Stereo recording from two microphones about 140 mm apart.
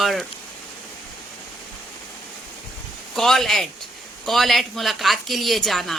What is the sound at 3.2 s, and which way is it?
Speech, centre (ahead or behind).